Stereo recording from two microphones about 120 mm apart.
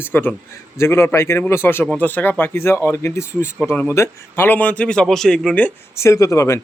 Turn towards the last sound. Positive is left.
turn(degrees=25)  # may be behind; listen again after turning